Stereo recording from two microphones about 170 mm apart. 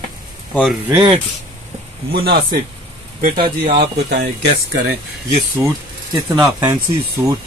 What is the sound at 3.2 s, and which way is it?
Speech, 60° right (ahead or behind).